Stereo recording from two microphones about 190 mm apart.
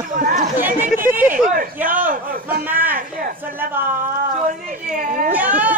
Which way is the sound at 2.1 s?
50° right (ahead or behind).